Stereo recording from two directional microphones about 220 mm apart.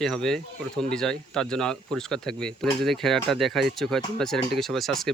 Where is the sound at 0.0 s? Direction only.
5° left (ahead or behind).